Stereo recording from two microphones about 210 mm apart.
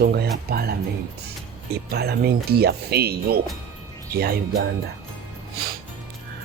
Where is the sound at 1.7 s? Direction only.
50° right (ahead or behind).